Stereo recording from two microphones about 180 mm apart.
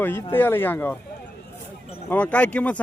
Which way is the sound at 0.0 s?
15° left (ahead or behind).